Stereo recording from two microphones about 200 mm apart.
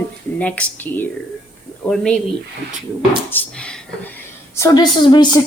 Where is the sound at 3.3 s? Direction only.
5° left (ahead or behind).